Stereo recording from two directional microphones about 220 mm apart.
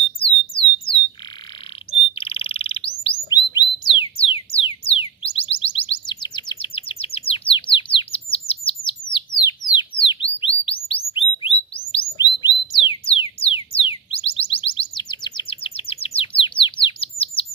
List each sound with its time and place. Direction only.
1.9 s bird: 25° left (ahead or behind)
12.2 s music: 20° left (ahead or behind)